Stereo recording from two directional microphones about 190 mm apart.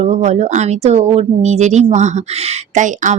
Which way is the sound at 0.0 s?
35° right (ahead or behind).